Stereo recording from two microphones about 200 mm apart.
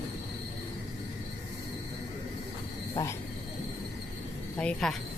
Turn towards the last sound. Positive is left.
turn(degrees=5)  # may be behind; listen again after turning